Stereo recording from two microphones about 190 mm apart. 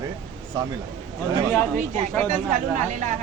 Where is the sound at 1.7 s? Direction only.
40° right (ahead or behind).